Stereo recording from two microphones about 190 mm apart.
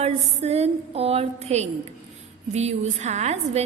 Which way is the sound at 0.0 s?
35° right (ahead or behind).